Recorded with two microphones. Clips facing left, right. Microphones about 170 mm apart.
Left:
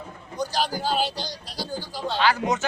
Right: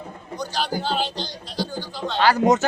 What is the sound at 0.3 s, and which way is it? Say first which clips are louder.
Speech: even; 10° left (ahead or behind).